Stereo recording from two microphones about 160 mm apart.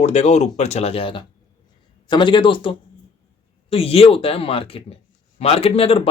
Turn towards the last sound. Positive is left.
turn(degrees=35)  # may be behind; listen again after turning